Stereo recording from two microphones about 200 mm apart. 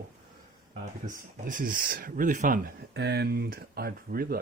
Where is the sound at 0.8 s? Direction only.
40° right (ahead or behind).